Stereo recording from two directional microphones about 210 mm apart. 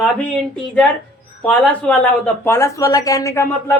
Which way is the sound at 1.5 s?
5° left (ahead or behind).